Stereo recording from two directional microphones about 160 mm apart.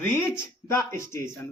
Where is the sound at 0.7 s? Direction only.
15° left (ahead or behind).